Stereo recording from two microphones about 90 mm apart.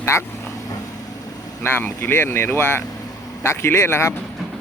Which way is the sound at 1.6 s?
25° left (ahead or behind).